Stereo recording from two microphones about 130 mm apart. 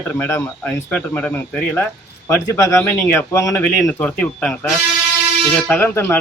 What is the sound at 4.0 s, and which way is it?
Speech, 10° left (ahead or behind).